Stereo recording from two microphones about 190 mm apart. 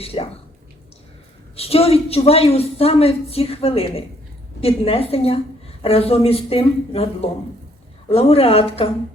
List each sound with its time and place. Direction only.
0.0 s a woman's voice: 30° left (ahead or behind)
1.5 s a woman's voice: 30° left (ahead or behind)